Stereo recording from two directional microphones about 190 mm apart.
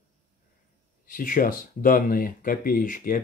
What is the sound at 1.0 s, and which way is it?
Speech, 45° left (ahead or behind).